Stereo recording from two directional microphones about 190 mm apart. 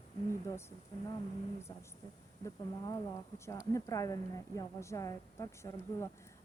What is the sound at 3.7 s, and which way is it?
Speech, 15° left (ahead or behind).